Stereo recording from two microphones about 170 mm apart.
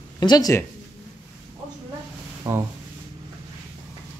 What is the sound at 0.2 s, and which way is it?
Speech, 20° left (ahead or behind).